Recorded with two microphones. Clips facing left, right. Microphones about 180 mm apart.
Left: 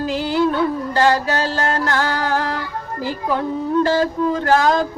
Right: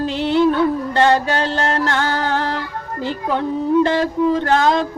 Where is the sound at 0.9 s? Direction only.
25° right (ahead or behind).